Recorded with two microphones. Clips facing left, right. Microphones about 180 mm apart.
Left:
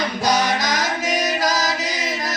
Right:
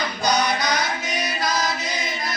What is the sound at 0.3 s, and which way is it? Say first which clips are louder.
Music: left 1 dB; 90° left.